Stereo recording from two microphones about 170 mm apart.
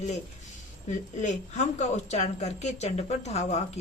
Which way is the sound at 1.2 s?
45° left (ahead or behind).